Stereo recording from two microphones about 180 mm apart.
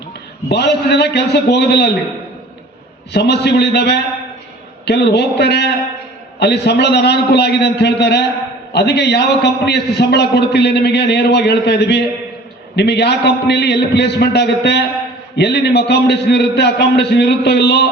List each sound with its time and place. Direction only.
0.4 s a man's voice: 70° left (ahead or behind)
3.1 s a man's voice: 70° left (ahead or behind)